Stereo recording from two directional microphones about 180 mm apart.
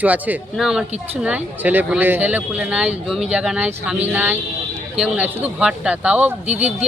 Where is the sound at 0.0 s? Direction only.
10° right (ahead or behind).